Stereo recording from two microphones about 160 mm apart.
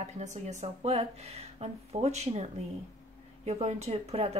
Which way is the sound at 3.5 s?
40° right (ahead or behind).